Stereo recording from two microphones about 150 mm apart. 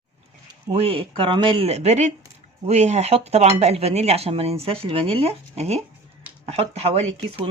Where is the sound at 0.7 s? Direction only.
40° right (ahead or behind).